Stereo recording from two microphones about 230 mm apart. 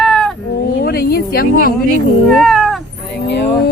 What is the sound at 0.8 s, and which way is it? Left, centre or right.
Speech, left.